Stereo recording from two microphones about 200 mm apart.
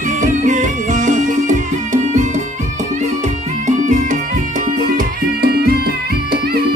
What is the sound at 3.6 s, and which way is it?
Music, 40° right (ahead or behind).